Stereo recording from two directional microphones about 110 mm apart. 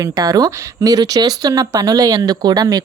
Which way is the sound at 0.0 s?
35° right (ahead or behind).